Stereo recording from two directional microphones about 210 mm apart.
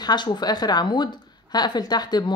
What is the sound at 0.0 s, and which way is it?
Speech, 20° left (ahead or behind).